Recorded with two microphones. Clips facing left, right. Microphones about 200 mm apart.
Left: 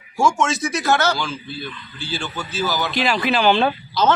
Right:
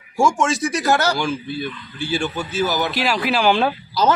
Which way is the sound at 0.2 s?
15° right (ahead or behind).